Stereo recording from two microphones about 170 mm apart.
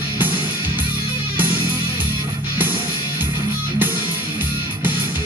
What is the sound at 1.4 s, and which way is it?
Music, 10° right (ahead or behind).